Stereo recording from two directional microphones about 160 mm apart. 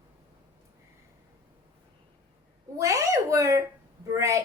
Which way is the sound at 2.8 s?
20° right (ahead or behind).